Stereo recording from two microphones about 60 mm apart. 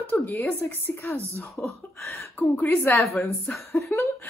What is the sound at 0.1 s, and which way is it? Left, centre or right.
A woman's voice, left.